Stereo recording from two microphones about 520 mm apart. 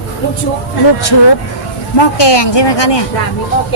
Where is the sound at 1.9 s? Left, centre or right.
Left.